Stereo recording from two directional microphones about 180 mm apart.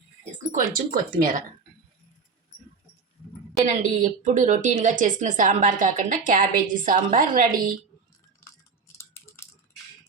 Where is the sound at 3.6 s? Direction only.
45° right (ahead or behind).